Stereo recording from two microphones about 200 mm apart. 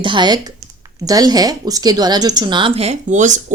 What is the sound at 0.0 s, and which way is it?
A woman's voice, 25° right (ahead or behind).